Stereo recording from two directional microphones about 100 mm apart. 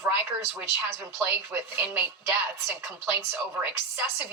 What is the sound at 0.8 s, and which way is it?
Speech, 20° right (ahead or behind).